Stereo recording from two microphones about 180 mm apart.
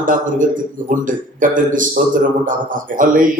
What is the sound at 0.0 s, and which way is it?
Speech, 45° right (ahead or behind).